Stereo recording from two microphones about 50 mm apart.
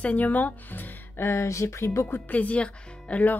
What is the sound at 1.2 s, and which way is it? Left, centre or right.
Speech, left.